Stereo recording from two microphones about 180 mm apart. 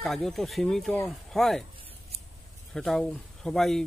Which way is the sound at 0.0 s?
Centre (ahead or behind).